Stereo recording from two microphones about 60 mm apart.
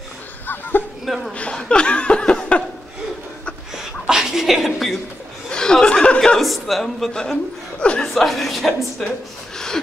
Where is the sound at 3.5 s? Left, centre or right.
Centre.